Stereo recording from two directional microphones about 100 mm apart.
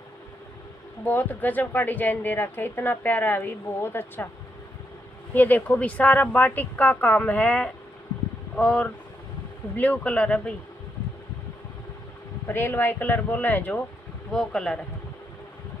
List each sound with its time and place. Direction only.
1.0 s a woman's voice: 20° left (ahead or behind)
5.3 s speech: 20° left (ahead or behind)
12.4 s speech: 20° left (ahead or behind)
14.3 s speech: 5° left (ahead or behind)